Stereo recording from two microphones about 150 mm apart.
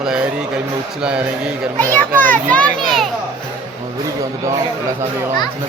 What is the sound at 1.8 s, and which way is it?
A child's voice, 10° left (ahead or behind).